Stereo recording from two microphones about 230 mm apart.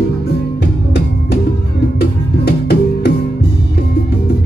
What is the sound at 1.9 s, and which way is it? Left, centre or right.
Music, left.